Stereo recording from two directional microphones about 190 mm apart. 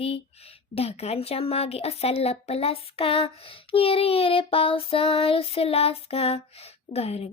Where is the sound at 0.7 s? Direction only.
30° left (ahead or behind).